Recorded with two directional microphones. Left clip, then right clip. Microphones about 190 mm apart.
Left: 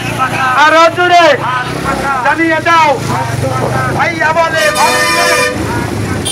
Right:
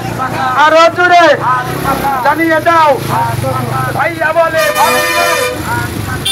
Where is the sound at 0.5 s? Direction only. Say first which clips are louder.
Even; 5° left (ahead or behind).